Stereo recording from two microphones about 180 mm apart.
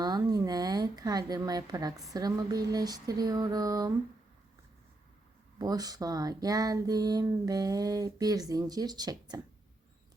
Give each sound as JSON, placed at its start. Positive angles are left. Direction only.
{"t": 0.0, "sound": "a woman's voice", "side_deg": -20}
{"t": 5.5, "sound": "a woman's voice", "side_deg": -20}